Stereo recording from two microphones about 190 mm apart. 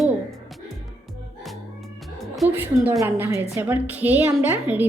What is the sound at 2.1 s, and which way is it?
A woman's voice, centre (ahead or behind).